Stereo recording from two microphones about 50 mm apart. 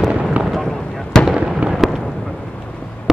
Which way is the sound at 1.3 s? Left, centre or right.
Centre.